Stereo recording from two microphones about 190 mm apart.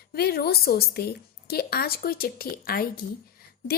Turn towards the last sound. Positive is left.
turn(degrees=55)  # may be behind; listen again after turning